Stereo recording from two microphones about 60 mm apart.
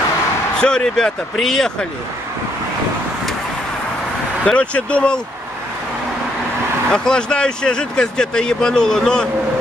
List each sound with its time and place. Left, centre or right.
0.6 s speech: centre
4.5 s speech: centre
6.9 s speech: centre